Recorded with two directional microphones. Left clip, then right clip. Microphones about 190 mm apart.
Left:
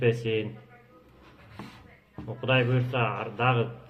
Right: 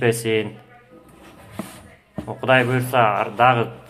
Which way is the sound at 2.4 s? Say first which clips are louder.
Right 9 dB; 15° left (ahead or behind).